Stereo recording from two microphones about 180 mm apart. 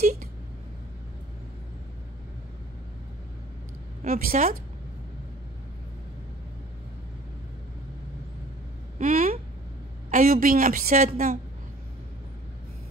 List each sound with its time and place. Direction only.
0.0 s speech: 50° right (ahead or behind)
4.0 s a woman's voice: 55° right (ahead or behind)
8.9 s a sound: 50° right (ahead or behind)
10.1 s a woman's voice: 50° right (ahead or behind)